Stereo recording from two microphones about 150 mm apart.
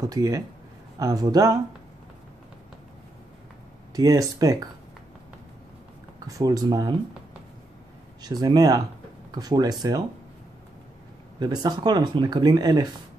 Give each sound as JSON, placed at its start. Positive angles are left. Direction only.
{"t": 0.0, "sound": "speech", "side_deg": -20}
{"t": 3.9, "sound": "speech", "side_deg": -25}
{"t": 6.1, "sound": "speech", "side_deg": -25}
{"t": 8.2, "sound": "speech", "side_deg": -25}
{"t": 11.3, "sound": "speech", "side_deg": -25}